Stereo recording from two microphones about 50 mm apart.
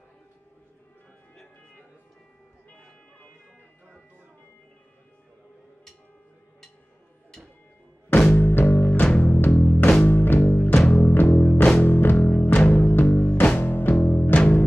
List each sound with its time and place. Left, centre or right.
8.3 s music: left
13.6 s music: left